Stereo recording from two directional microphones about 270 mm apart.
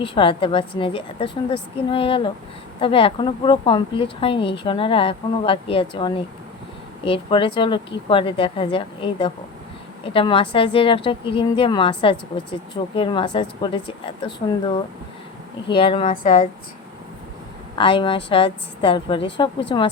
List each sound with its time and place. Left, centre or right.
0.0 s a woman's voice: centre
15.7 s a woman's voice: centre
17.7 s a woman's voice: centre